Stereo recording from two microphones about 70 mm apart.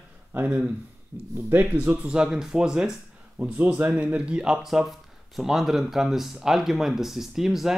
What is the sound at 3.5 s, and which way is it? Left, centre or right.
Speech, right.